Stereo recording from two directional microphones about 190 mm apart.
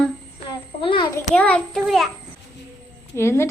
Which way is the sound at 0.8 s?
25° left (ahead or behind).